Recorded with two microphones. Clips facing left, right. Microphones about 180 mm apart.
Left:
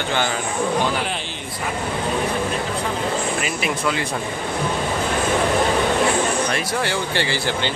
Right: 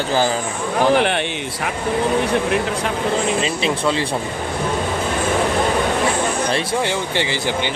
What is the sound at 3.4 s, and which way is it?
Speech, 30° right (ahead or behind).